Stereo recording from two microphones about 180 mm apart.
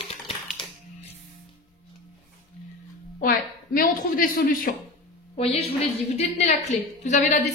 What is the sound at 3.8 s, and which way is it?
Speech, 50° left (ahead or behind).